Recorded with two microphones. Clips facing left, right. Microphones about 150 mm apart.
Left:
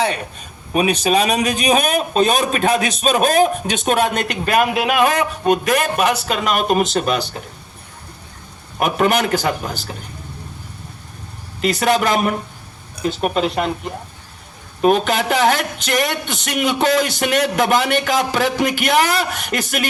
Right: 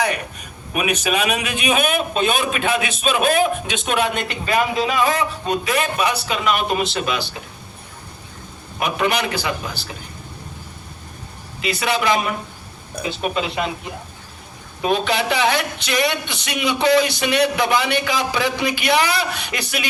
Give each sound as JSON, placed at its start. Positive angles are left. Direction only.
{"t": 0.0, "sound": "a man's voice", "side_deg": 30}
{"t": 4.3, "sound": "speech", "side_deg": 60}
{"t": 8.8, "sound": "speech", "side_deg": 45}
{"t": 11.6, "sound": "speech", "side_deg": 45}